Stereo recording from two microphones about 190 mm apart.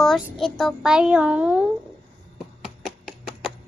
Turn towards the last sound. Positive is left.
turn(degrees=0)  # may be behind; listen again after turning